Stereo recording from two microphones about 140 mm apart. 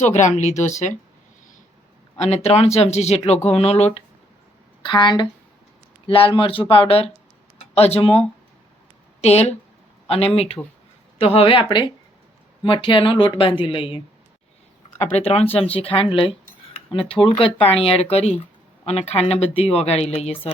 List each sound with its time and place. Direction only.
0.0 s speech: 55° left (ahead or behind)
2.1 s speech: 50° left (ahead or behind)
4.8 s speech: 30° left (ahead or behind)
9.2 s speech: 50° left (ahead or behind)
15.1 s speech: 45° left (ahead or behind)